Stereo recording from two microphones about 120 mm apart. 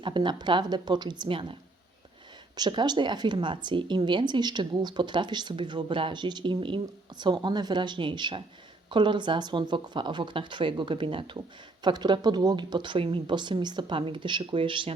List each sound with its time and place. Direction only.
0.0 s speech: 40° right (ahead or behind)
2.6 s speech: 40° right (ahead or behind)